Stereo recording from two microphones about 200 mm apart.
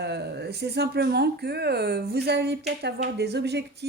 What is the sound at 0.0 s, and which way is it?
A woman's voice, 55° right (ahead or behind).